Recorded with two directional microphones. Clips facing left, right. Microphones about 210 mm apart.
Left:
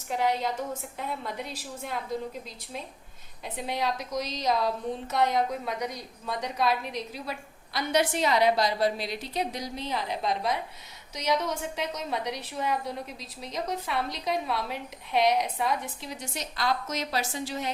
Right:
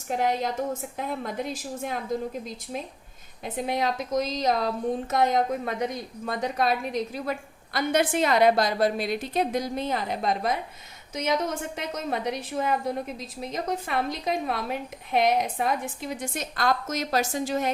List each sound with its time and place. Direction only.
0.1 s a woman's voice: 50° right (ahead or behind)
3.4 s a woman's voice: 50° right (ahead or behind)